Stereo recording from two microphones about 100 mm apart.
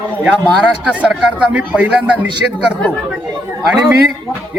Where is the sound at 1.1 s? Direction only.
10° right (ahead or behind).